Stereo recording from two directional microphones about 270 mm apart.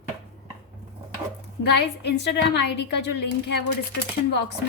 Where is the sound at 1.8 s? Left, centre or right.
Left.